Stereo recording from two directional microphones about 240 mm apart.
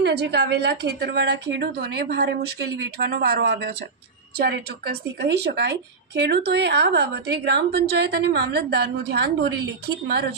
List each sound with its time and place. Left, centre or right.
0.0 s a woman's voice: right